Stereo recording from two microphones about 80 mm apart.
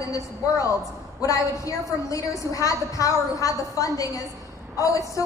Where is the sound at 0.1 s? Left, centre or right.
Left.